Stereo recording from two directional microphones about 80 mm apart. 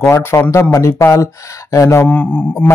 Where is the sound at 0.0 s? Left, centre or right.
Left.